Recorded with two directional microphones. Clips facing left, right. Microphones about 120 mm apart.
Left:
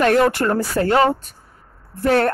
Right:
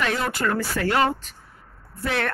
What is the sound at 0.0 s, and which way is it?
Speech, 55° left (ahead or behind).